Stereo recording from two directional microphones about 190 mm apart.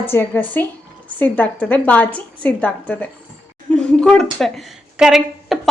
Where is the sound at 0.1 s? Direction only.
10° left (ahead or behind).